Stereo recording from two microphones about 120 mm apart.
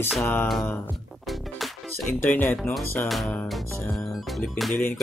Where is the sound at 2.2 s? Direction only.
15° left (ahead or behind).